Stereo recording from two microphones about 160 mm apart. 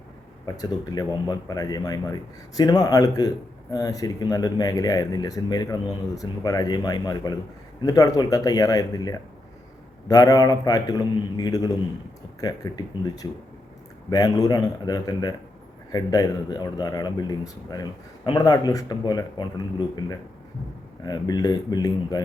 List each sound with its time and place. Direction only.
0.4 s a man's voice: 25° left (ahead or behind)
21.0 s a man's voice: 25° left (ahead or behind)